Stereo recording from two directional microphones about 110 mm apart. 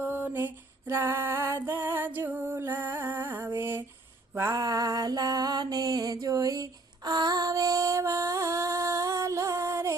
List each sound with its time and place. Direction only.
0.0 s female singing: 15° right (ahead or behind)
4.4 s music: 30° right (ahead or behind)